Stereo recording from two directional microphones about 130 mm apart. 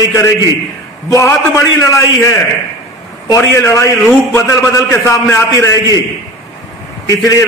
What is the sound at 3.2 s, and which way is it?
A man's voice, 25° left (ahead or behind).